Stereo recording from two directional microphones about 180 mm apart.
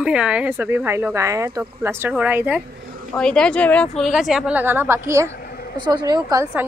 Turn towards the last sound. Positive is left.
turn(degrees=-15)  # may be behind; listen again after turning